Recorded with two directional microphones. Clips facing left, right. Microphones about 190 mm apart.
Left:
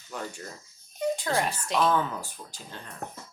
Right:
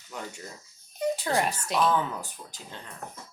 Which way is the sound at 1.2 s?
15° right (ahead or behind).